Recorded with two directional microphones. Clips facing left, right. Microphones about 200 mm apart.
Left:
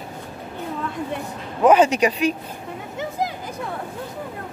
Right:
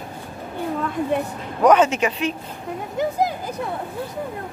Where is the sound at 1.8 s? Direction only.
15° left (ahead or behind).